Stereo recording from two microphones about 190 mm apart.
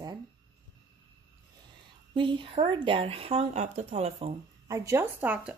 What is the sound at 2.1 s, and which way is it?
Speech, 25° right (ahead or behind).